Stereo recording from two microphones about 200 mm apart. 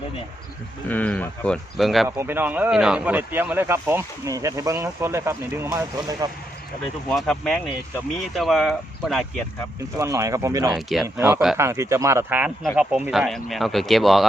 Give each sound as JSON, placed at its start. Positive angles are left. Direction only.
{"t": 0.9, "sound": "speech", "side_deg": 5}
{"t": 2.0, "sound": "speech", "side_deg": -10}
{"t": 7.1, "sound": "speech", "side_deg": 0}
{"t": 10.0, "sound": "speech", "side_deg": -15}
{"t": 10.7, "sound": "speech", "side_deg": 0}
{"t": 11.2, "sound": "speech", "side_deg": -10}